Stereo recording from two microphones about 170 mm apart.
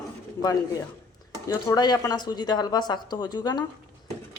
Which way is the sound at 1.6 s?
25° left (ahead or behind).